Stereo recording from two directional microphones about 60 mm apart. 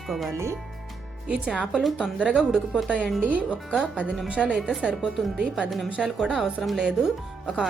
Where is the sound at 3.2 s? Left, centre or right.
Right.